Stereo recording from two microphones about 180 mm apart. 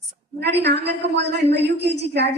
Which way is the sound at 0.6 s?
70° right (ahead or behind).